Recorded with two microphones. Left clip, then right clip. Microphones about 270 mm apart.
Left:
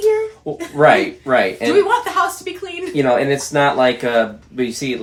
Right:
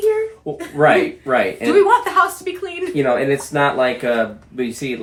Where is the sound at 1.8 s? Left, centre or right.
Centre.